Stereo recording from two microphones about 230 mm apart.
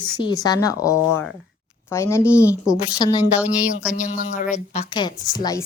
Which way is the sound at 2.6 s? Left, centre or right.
Centre.